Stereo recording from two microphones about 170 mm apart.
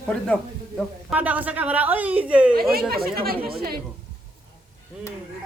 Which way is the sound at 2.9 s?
65° right (ahead or behind).